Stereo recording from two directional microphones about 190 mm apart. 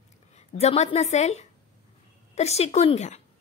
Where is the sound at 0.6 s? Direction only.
35° left (ahead or behind).